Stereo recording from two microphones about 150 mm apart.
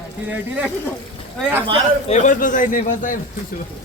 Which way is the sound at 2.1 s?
60° left (ahead or behind).